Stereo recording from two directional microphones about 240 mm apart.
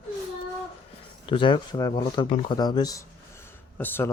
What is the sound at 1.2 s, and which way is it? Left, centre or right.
Speech, centre.